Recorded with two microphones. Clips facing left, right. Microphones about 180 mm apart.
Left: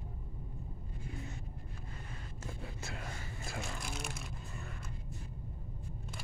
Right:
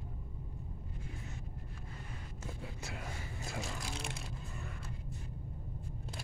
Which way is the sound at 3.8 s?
30° right (ahead or behind).